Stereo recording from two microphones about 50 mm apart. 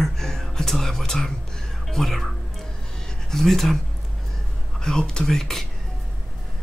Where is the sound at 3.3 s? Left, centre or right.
Centre.